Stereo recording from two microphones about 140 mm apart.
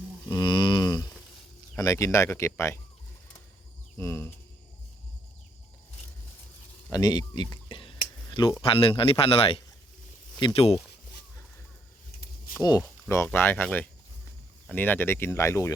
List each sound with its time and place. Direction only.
0.3 s a sound: 30° left (ahead or behind)
1.7 s speech: 20° left (ahead or behind)
3.9 s speech: 15° left (ahead or behind)
6.9 s a man's voice: 30° left (ahead or behind)
12.5 s speech: 25° left (ahead or behind)